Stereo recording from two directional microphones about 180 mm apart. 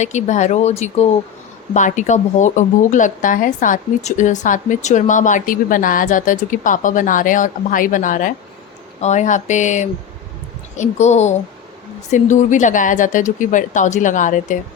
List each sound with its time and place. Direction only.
0.0 s speech: 40° left (ahead or behind)